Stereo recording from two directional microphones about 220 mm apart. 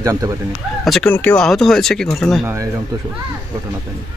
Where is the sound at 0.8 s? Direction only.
5° left (ahead or behind).